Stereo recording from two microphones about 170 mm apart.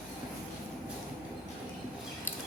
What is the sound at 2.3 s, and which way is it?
Scissors, 10° left (ahead or behind).